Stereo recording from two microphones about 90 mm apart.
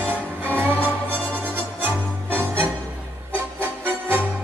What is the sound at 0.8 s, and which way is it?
Music, 15° left (ahead or behind).